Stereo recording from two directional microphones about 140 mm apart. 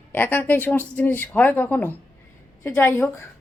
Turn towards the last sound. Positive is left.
turn(degrees=15)  # may be behind; listen again after turning